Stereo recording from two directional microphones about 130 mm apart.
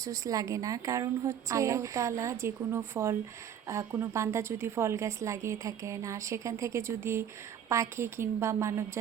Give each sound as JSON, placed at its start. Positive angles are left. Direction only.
{"t": 0.0, "sound": "a woman's voice", "side_deg": -25}